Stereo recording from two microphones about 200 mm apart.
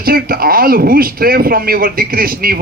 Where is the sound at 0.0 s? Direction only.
50° right (ahead or behind).